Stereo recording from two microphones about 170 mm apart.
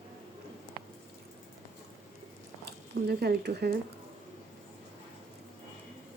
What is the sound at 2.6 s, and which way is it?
Speech, 70° right (ahead or behind).